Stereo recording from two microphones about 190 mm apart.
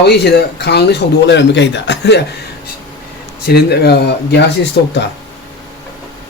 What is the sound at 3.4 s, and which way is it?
Speech, 55° left (ahead or behind).